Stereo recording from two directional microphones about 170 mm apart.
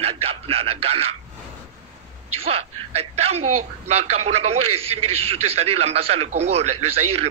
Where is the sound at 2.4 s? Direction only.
35° right (ahead or behind).